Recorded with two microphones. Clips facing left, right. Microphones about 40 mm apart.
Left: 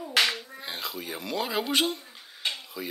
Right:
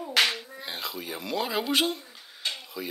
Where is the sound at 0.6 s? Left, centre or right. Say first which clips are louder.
Even; centre.